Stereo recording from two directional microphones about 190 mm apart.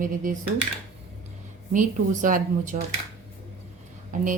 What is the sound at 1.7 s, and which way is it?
Speech, 45° right (ahead or behind).